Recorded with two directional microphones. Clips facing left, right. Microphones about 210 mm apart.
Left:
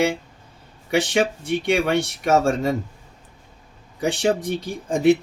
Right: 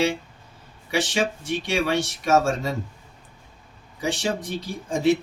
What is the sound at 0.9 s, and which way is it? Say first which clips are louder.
Speech: left 4 dB; 60° left (ahead or behind).